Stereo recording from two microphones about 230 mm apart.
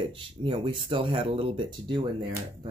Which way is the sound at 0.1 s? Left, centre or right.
Right.